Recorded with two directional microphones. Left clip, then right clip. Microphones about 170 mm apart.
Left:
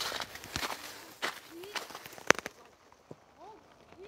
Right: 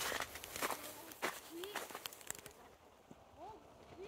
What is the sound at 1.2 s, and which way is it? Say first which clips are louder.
Run: left 5 dB; 90° left.